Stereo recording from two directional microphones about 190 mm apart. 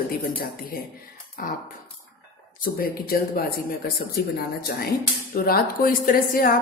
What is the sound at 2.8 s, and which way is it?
Speech, 55° left (ahead or behind).